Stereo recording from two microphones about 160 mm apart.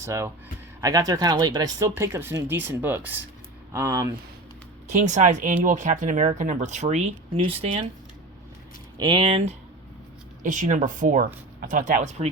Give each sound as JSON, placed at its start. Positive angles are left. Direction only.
{"t": 0.0, "sound": "speech", "side_deg": -20}
{"t": 4.9, "sound": "speech", "side_deg": -50}
{"t": 9.0, "sound": "speech", "side_deg": -30}
{"t": 10.4, "sound": "speech", "side_deg": -50}